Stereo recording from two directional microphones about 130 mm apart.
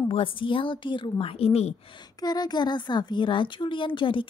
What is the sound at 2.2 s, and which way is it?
Speech, 30° left (ahead or behind).